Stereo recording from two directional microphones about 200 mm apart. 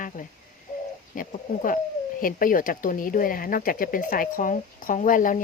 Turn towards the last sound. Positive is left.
turn(degrees=40)  # may be behind; listen again after turning